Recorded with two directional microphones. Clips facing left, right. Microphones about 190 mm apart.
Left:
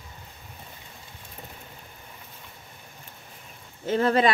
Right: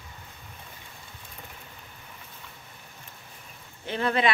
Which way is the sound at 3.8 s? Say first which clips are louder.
Left 4 dB; 40° left (ahead or behind).